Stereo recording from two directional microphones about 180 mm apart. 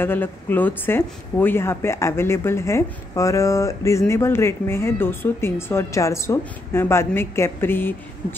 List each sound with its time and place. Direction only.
0.0 s speech: 10° left (ahead or behind)